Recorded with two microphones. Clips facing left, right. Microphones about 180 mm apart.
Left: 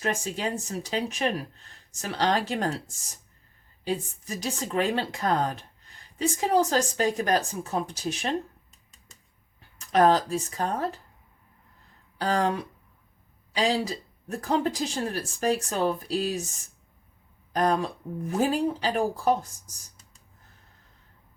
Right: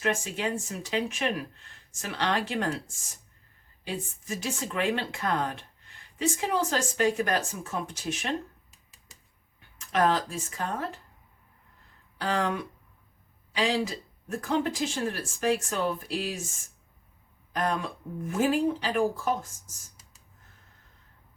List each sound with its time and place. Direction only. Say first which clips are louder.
0.0 s speech: even; 40° left (ahead or behind)
3.8 s speech: left 4 dB; 35° left (ahead or behind)
8.7 s finger snapping: left 1 dB; 5° right (ahead or behind)
9.9 s speech: left 5 dB; 40° left (ahead or behind)
12.2 s speech: left 3 dB; 40° left (ahead or behind)